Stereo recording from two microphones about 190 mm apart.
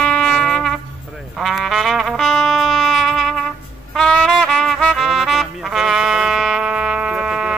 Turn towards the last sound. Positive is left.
turn(degrees=-5)  # may be behind; listen again after turning